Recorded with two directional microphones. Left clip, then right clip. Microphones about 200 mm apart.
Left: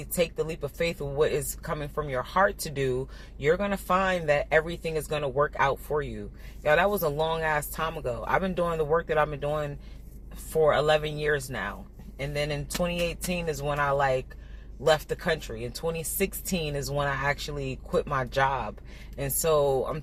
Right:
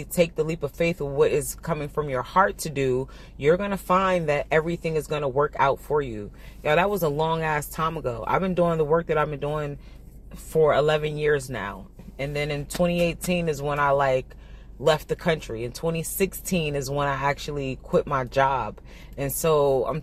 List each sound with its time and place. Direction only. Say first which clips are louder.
0.2 s speech: right 5 dB; 40° right (ahead or behind)